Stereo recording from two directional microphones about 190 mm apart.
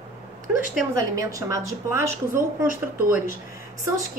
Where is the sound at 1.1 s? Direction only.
15° right (ahead or behind).